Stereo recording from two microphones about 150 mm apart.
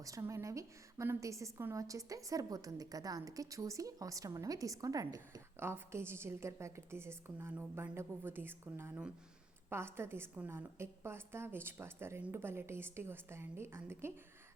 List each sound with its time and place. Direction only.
0.0 s a woman's voice: 20° right (ahead or behind)